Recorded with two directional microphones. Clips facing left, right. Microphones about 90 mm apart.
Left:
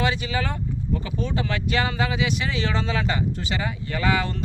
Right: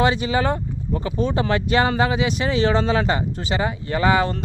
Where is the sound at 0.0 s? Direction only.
30° right (ahead or behind).